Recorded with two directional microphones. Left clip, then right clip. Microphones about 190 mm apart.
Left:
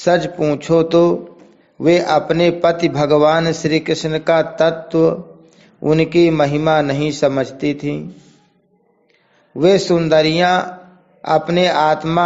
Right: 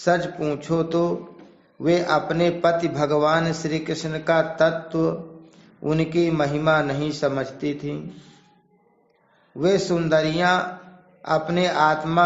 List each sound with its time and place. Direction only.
0.0 s a man's voice: 40° left (ahead or behind)
9.6 s a man's voice: 40° left (ahead or behind)